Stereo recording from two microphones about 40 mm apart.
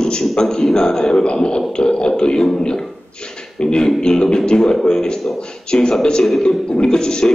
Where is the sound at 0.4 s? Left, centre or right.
Centre.